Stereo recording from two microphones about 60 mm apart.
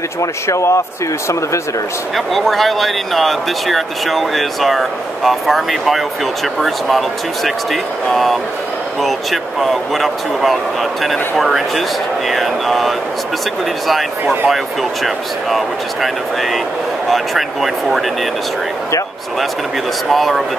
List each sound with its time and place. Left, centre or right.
0.2 s speech: left
2.1 s speech: centre
14.2 s speech: right
14.5 s speech: centre
17.1 s speech: centre
20.1 s speech: centre